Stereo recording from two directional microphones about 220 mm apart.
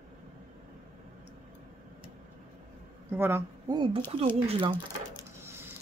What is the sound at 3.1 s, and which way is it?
Speech, 10° right (ahead or behind).